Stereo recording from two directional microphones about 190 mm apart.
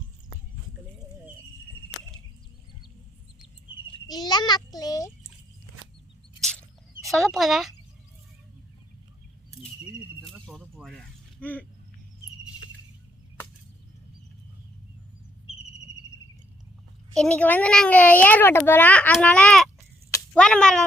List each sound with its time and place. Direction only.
4.0 s a child's voice: 20° left (ahead or behind)
6.4 s drip: 5° left (ahead or behind)
10.2 s mechanisms: centre (ahead or behind)
17.2 s a child's voice: 5° left (ahead or behind)
20.1 s a sound: 15° left (ahead or behind)
20.4 s speech: 5° left (ahead or behind)